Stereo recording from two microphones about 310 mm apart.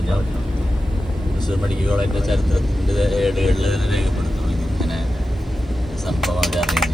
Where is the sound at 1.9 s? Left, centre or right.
Centre.